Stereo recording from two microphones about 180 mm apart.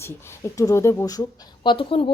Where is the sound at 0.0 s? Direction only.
15° left (ahead or behind).